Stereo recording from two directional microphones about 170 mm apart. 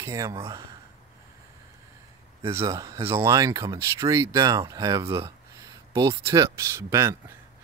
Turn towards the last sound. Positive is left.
turn(degrees=-15)  # may be behind; listen again after turning